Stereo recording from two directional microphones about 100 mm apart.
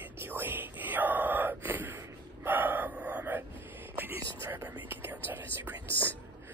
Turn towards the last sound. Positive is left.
turn(degrees=-20)  # may be behind; listen again after turning